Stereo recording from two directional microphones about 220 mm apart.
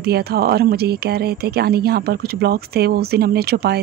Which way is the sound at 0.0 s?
45° right (ahead or behind).